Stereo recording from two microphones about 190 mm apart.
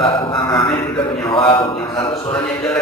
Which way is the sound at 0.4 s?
25° left (ahead or behind).